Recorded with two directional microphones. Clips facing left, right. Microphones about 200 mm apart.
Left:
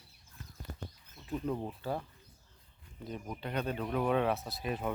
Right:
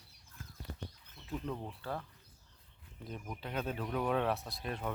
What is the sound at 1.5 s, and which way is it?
Speech, 15° left (ahead or behind).